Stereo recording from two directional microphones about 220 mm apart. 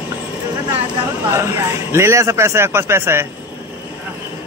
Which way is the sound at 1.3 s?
10° right (ahead or behind).